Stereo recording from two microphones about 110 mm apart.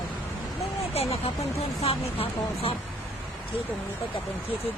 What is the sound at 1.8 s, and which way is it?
Speech, 60° left (ahead or behind).